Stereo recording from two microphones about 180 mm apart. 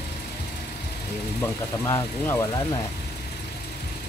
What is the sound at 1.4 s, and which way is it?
Speech, 15° left (ahead or behind).